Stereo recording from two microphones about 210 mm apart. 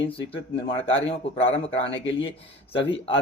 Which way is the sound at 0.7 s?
25° left (ahead or behind).